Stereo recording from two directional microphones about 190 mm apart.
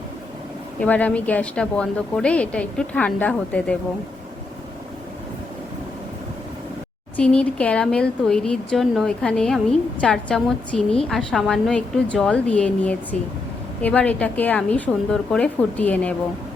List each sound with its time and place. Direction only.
0.8 s a woman's voice: 10° left (ahead or behind)
7.2 s a woman's voice: 5° left (ahead or behind)